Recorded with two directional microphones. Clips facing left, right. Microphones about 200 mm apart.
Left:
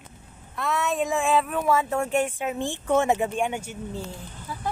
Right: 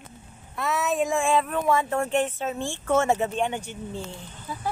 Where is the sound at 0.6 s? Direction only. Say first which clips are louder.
Right 1 dB; centre (ahead or behind).